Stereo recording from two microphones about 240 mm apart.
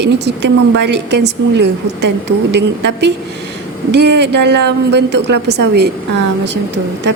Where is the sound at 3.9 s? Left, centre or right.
Right.